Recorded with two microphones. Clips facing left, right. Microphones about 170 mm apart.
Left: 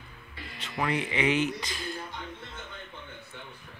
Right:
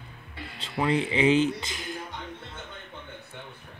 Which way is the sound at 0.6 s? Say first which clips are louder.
Right 4 dB; 30° right (ahead or behind).